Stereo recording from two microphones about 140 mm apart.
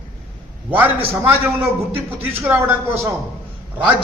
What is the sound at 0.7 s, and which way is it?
A man's voice, 10° right (ahead or behind).